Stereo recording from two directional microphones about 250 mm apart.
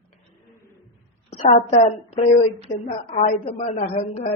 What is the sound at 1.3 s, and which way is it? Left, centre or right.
A woman's voice, left.